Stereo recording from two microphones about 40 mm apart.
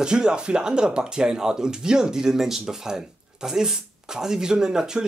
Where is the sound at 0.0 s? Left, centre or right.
Centre.